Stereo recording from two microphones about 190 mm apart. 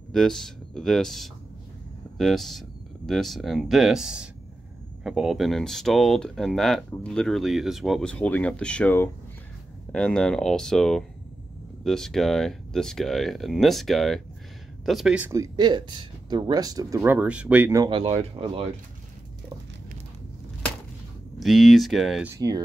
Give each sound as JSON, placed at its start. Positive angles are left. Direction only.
{"t": 0.1, "sound": "speech", "side_deg": 5}
{"t": 21.4, "sound": "speech", "side_deg": 0}
{"t": 22.3, "sound": "speech", "side_deg": -20}